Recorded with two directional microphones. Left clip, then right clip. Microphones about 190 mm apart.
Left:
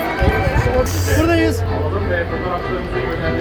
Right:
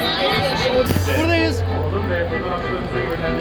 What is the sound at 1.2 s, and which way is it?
Speech, 75° left (ahead or behind).